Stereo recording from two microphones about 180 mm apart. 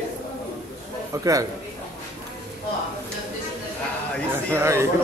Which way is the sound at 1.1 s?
20° right (ahead or behind).